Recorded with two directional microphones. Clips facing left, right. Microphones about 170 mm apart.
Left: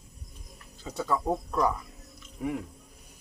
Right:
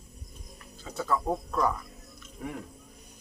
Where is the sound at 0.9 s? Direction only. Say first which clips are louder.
Left 1 dB; 15° left (ahead or behind).